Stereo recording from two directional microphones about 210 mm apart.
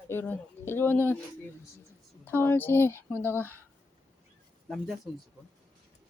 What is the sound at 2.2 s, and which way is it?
Speech, 10° left (ahead or behind).